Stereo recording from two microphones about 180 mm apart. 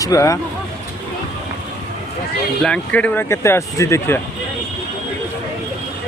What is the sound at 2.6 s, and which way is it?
Speech, 5° left (ahead or behind).